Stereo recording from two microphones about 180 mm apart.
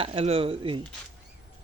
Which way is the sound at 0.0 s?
30° right (ahead or behind).